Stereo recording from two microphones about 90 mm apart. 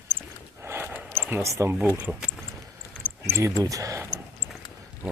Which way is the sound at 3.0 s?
15° right (ahead or behind).